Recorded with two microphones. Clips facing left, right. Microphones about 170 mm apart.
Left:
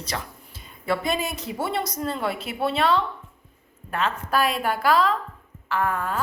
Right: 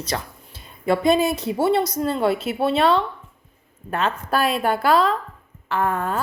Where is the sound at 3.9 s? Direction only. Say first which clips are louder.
Right 3 dB; 25° right (ahead or behind).